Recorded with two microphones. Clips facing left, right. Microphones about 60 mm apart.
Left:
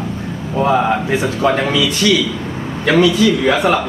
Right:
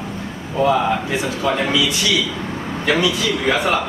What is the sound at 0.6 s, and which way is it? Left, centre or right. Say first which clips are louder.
Speech: left 2 dB; left.